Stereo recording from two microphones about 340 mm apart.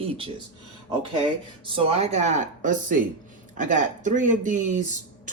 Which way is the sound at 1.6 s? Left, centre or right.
Centre.